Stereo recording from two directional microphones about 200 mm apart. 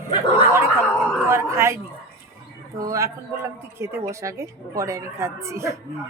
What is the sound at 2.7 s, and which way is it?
A woman's voice, 15° right (ahead or behind).